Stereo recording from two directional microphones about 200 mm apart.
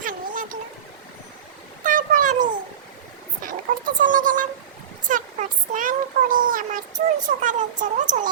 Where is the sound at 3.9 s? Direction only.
40° right (ahead or behind).